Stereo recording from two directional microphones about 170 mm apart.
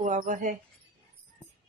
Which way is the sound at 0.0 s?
50° right (ahead or behind).